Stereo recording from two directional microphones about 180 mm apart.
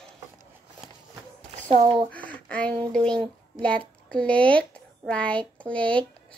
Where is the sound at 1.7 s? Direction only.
35° right (ahead or behind).